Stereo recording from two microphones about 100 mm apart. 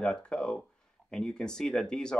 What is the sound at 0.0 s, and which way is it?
Speech, 10° left (ahead or behind).